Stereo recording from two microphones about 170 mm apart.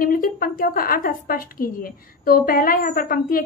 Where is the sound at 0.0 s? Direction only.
55° left (ahead or behind).